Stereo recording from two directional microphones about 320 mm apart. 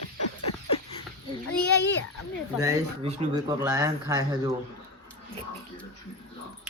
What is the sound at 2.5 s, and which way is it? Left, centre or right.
Speech, centre.